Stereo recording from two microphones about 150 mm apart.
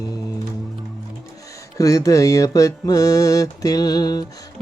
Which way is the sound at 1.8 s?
20° left (ahead or behind).